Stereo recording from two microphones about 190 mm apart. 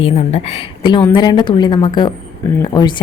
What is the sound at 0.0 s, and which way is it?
A woman's voice, 35° left (ahead or behind).